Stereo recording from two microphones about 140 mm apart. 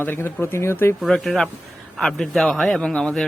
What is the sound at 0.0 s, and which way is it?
Speech, 15° left (ahead or behind).